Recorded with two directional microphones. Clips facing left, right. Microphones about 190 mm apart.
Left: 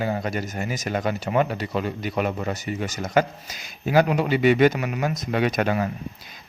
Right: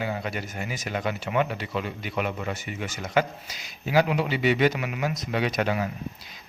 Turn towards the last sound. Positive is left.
turn(degrees=50)  # may be behind; listen again after turning